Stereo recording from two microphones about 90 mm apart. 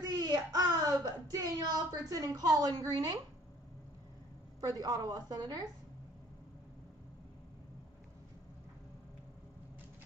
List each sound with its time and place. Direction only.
0.0 s speech: 45° right (ahead or behind)
4.6 s a woman's voice: 45° right (ahead or behind)